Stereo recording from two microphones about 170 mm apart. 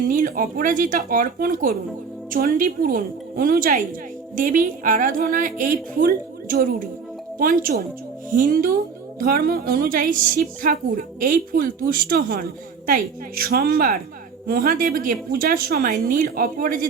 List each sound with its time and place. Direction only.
0.1 s a woman's voice: 55° right (ahead or behind)